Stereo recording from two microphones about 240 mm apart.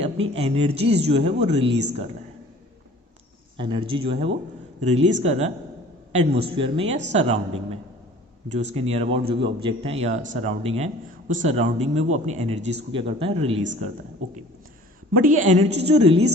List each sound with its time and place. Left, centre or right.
0.0 s speech: right
3.6 s speech: right
8.4 s speech: right
15.1 s speech: right